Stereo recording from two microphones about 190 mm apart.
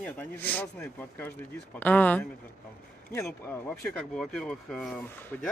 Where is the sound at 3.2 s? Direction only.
10° left (ahead or behind).